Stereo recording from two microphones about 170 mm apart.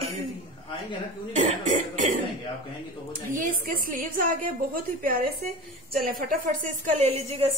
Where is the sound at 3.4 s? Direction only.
50° right (ahead or behind).